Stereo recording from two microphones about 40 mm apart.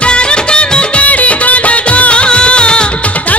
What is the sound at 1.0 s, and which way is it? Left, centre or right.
Music, left.